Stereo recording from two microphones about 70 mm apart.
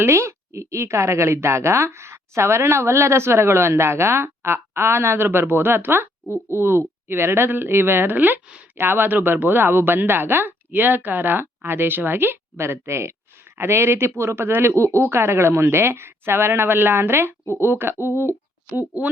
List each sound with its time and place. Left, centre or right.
0.0 s speech: right
18.8 s a woman's voice: right